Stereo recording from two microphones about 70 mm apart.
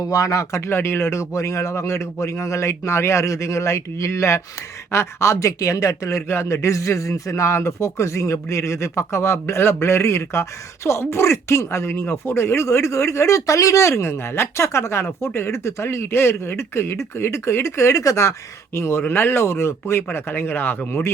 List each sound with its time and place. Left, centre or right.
0.0 s speech: left